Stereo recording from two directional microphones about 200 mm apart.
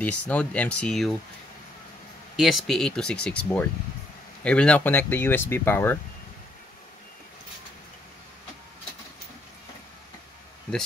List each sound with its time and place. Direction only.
0.0 s speech: 10° left (ahead or behind)
2.3 s speech: centre (ahead or behind)